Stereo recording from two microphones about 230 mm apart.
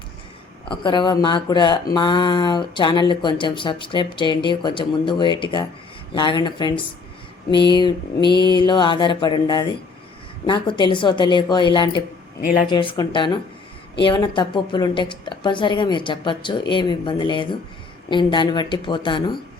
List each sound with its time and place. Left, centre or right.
0.7 s a woman's voice: centre